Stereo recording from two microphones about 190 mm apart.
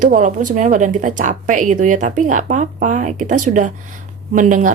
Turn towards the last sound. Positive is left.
turn(degrees=-45)  # may be behind; listen again after turning